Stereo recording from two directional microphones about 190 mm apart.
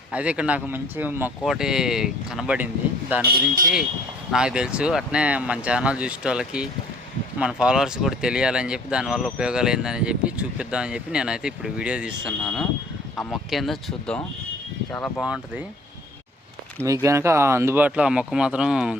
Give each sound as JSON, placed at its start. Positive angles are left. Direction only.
{"t": 0.1, "sound": "speech", "side_deg": -5}
{"t": 3.2, "sound": "speech", "side_deg": -50}
{"t": 4.3, "sound": "speech", "side_deg": -5}
{"t": 15.2, "sound": "speech", "side_deg": -5}
{"t": 16.8, "sound": "speech", "side_deg": -15}